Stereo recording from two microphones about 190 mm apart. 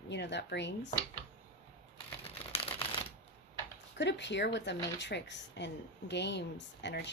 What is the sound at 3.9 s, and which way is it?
Speech, 65° left (ahead or behind).